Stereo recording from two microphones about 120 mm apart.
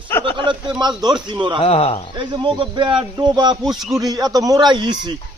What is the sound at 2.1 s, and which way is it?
A man's voice, 40° right (ahead or behind).